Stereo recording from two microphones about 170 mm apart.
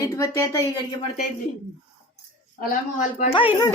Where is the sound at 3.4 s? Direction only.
30° left (ahead or behind).